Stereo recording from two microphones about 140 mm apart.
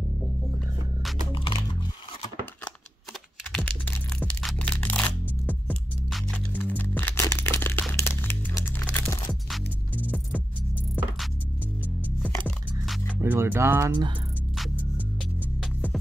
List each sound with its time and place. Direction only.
1.3 s typing: 35° left (ahead or behind)
3.5 s music: 5° left (ahead or behind)
7.5 s a sound: 15° left (ahead or behind)
8.0 s music: 15° left (ahead or behind)
12.2 s music: 5° left (ahead or behind)
13.2 s music: 15° right (ahead or behind)